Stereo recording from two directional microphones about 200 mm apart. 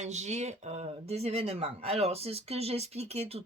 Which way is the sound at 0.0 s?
35° right (ahead or behind).